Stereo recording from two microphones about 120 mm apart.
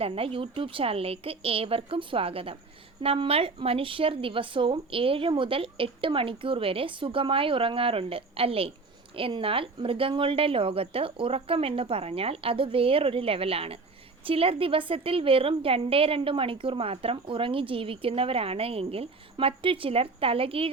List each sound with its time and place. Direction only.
0.0 s a woman's voice: 50° right (ahead or behind)